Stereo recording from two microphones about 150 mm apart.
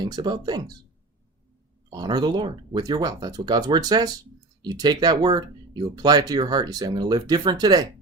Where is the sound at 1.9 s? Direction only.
25° right (ahead or behind).